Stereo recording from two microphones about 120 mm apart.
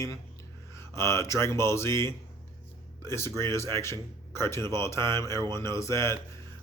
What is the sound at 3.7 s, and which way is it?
Speech, 25° left (ahead or behind).